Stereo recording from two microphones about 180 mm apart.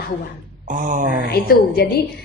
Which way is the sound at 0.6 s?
45° right (ahead or behind).